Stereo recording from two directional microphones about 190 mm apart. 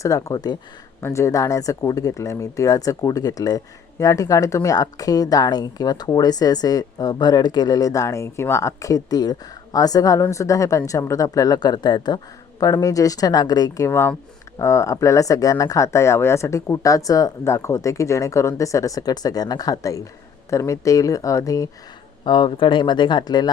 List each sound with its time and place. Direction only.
0.0 s speech: 15° left (ahead or behind)